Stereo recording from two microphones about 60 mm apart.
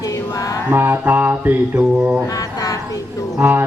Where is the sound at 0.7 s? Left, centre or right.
Right.